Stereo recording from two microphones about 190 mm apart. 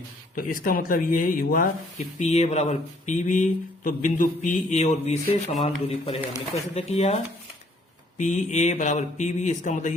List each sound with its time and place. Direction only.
0.3 s speech: 50° left (ahead or behind)
2.1 s speech: 35° left (ahead or behind)
8.2 s speech: 40° left (ahead or behind)